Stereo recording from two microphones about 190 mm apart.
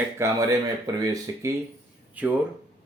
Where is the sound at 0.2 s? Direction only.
15° right (ahead or behind).